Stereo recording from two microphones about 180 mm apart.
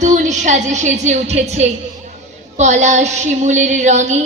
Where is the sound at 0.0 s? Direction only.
40° right (ahead or behind).